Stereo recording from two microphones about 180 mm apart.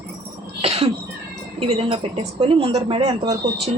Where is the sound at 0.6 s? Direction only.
35° right (ahead or behind).